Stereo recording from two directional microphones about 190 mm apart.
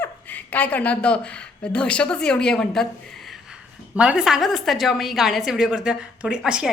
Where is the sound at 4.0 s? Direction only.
5° right (ahead or behind).